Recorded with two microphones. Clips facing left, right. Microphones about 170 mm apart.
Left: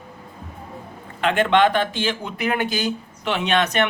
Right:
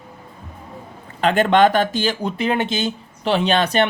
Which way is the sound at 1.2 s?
40° right (ahead or behind).